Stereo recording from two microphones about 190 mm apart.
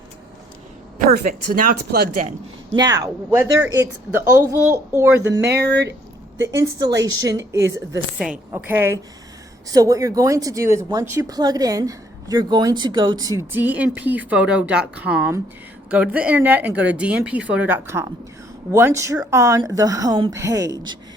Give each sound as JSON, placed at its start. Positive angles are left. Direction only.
{"t": 1.1, "sound": "speech", "side_deg": -50}
{"t": 2.7, "sound": "speech", "side_deg": -20}
{"t": 5.4, "sound": "speech", "side_deg": -60}
{"t": 6.6, "sound": "speech", "side_deg": -20}